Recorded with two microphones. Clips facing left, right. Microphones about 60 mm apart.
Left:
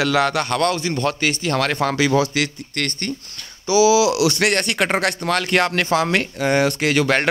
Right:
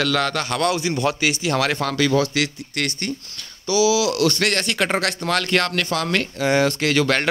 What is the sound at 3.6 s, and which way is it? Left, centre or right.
Speech, left.